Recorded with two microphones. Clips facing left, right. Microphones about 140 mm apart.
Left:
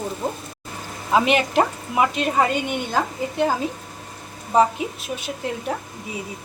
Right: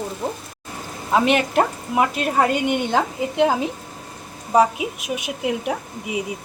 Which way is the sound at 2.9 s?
20° right (ahead or behind).